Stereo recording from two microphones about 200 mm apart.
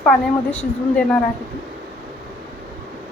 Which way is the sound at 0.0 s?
5° left (ahead or behind).